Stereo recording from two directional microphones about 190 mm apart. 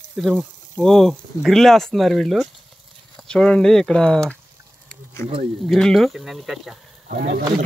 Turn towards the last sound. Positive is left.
turn(degrees=-50)  # may be behind; listen again after turning